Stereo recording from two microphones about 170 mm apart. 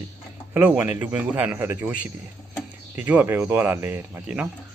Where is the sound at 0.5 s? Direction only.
10° right (ahead or behind).